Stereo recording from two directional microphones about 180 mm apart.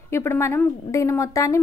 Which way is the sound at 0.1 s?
15° left (ahead or behind).